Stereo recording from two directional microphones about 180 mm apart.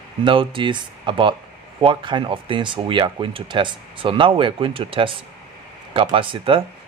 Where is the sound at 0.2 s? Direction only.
30° right (ahead or behind).